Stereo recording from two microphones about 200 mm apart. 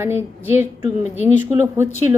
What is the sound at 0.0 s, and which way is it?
Speech, 10° right (ahead or behind).